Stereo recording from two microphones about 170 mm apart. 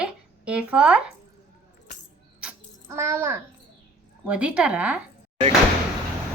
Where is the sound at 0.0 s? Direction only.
5° right (ahead or behind).